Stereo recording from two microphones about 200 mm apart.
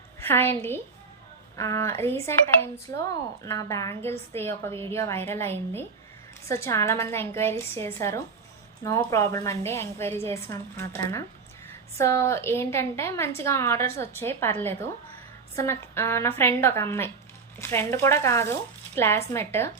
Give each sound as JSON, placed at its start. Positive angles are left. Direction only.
{"t": 0.2, "sound": "a woman's voice", "side_deg": 10}
{"t": 3.4, "sound": "a woman's voice", "side_deg": 15}